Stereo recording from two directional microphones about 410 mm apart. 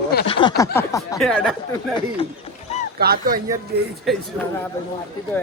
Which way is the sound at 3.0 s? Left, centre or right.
Right.